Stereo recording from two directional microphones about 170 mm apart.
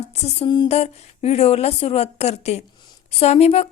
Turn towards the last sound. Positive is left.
turn(degrees=35)  # may be behind; listen again after turning